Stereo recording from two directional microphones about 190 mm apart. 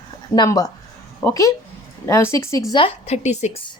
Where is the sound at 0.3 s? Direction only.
20° left (ahead or behind); by 3.6 s 35° left (ahead or behind).